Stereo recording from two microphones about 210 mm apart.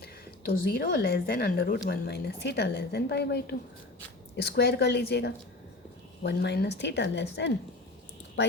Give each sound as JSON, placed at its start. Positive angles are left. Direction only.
{"t": 0.0, "sound": "a woman's voice", "side_deg": 45}